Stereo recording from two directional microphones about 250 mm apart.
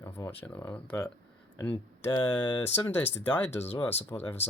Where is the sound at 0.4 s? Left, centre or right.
Centre.